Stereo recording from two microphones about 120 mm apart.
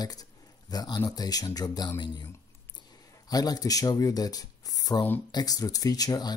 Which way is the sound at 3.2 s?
35° left (ahead or behind).